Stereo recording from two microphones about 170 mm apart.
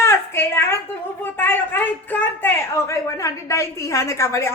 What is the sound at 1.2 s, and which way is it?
A woman's voice, 10° left (ahead or behind).